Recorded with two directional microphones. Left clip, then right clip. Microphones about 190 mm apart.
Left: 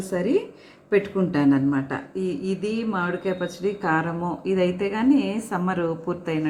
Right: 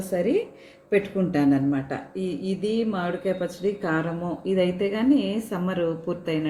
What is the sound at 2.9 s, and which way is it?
Speech, 20° left (ahead or behind).